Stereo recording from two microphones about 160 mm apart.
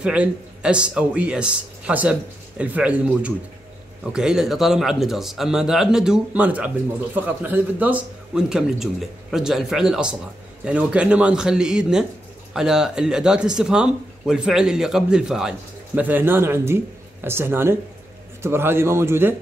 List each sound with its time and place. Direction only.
0.0 s speech: 5° right (ahead or behind)